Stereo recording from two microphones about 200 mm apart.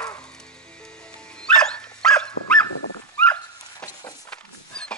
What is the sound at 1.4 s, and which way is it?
Dog, 5° left (ahead or behind).